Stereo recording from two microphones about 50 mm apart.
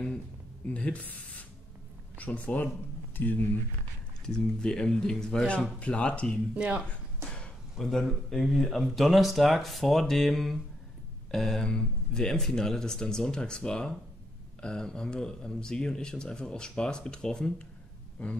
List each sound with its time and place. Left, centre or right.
0.7 s speech: left
2.1 s speech: left
4.3 s speech: centre
6.5 s speech: right
7.7 s speech: centre